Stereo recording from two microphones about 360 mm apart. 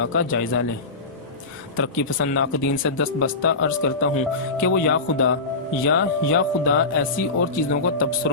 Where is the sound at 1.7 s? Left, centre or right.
Left.